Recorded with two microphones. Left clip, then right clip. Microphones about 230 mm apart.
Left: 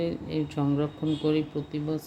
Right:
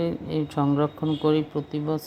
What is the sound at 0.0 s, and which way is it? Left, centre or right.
Speech, centre.